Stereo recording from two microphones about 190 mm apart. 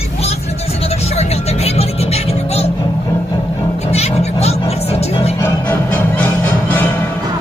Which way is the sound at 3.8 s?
35° left (ahead or behind).